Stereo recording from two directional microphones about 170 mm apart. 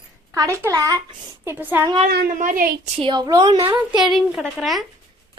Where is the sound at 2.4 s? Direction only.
55° right (ahead or behind).